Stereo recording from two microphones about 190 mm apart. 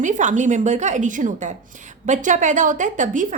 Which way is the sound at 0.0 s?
40° right (ahead or behind).